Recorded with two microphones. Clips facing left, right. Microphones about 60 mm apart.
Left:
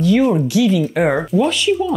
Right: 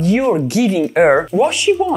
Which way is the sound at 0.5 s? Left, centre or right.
Right.